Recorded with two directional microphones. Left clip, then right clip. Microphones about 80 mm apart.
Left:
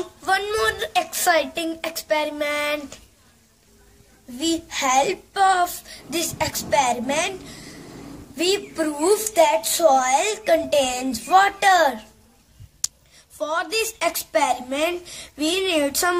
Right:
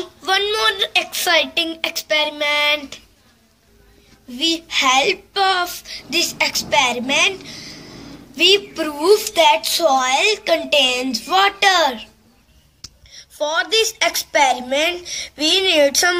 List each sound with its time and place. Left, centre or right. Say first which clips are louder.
0.0 s a sound: right 3 dB; left
0.8 s a woman's voice: right 2 dB; left
4.4 s a woman's voice: right 6 dB; left
9.8 s speech: right 1 dB; left
13.4 s a woman's voice: right 6 dB; centre